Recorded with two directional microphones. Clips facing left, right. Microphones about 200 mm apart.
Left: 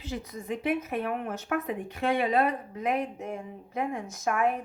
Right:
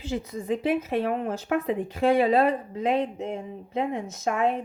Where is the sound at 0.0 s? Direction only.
25° right (ahead or behind).